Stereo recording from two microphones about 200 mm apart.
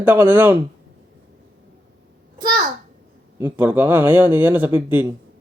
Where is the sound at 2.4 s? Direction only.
20° right (ahead or behind).